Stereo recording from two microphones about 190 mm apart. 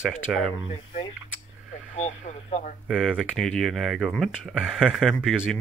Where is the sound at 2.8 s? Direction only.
Centre (ahead or behind).